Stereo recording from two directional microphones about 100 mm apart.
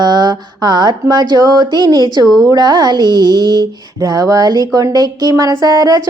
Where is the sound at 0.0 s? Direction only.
45° right (ahead or behind).